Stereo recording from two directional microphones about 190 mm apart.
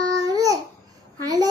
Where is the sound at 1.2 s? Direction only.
20° right (ahead or behind).